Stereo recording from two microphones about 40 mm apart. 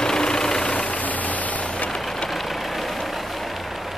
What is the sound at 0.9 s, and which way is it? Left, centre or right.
Vehicle, left.